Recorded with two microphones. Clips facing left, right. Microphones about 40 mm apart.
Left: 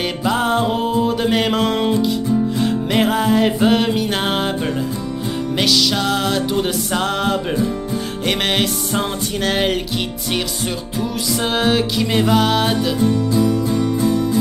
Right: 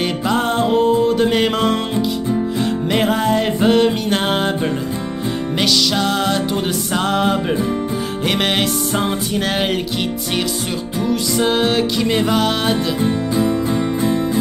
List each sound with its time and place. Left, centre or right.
0.0 s music: centre
5.6 s music: centre
11.0 s music: centre
13.0 s music: right